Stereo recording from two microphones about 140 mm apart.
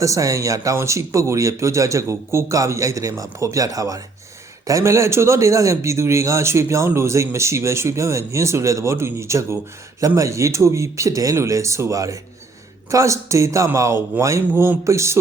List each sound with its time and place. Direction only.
0.0 s a man's voice: 25° right (ahead or behind)